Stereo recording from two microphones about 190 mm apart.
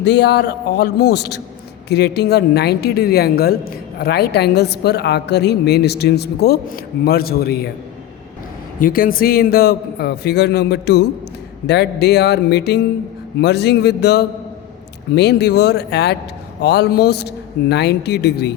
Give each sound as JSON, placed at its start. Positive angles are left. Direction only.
{"t": 0.0, "sound": "a woman's voice", "side_deg": 65}
{"t": 8.8, "sound": "a woman's voice", "side_deg": 50}